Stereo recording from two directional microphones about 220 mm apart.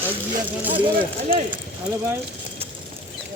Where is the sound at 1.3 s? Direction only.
40° right (ahead or behind).